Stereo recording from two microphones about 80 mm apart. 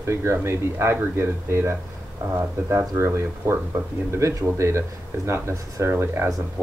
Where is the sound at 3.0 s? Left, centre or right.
Right.